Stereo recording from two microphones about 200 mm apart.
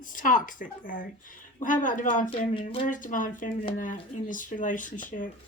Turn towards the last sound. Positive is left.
turn(degrees=40)  # may be behind; listen again after turning